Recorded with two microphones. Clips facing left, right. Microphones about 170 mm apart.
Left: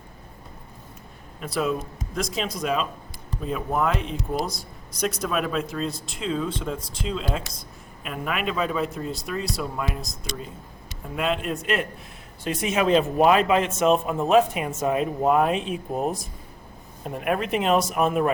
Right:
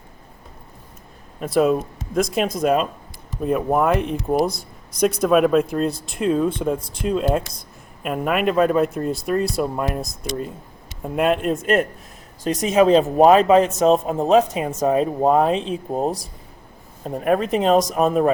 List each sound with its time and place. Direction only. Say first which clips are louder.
1.5 s speech: right 8 dB; 50° right (ahead or behind)